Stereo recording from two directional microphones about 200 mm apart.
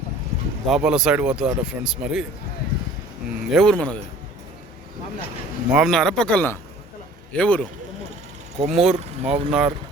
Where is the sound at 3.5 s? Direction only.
5° left (ahead or behind).